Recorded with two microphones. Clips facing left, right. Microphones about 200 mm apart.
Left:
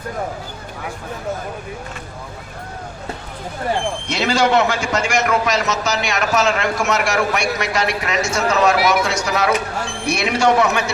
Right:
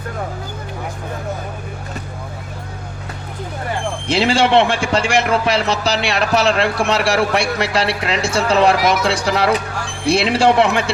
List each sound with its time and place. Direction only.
4.1 s a man's voice: 30° right (ahead or behind)